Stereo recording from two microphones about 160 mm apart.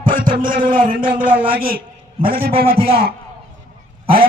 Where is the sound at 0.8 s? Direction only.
35° right (ahead or behind).